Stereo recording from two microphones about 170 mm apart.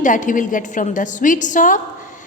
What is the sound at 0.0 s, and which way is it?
A woman's voice, 50° left (ahead or behind).